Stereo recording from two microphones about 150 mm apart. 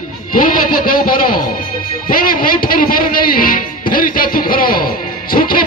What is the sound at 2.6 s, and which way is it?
A man's voice, 75° left (ahead or behind).